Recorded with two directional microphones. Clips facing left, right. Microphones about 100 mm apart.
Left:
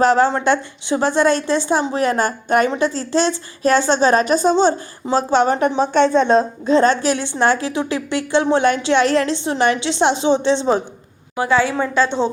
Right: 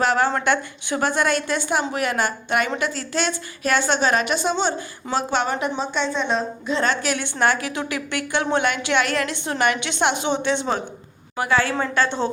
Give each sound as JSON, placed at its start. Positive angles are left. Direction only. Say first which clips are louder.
{"t": 0.0, "sound": "a woman's voice", "louder": "left 5 dB", "side_deg": 35}
{"t": 11.6, "sound": "a woman's voice", "louder": "left 4 dB", "side_deg": 10}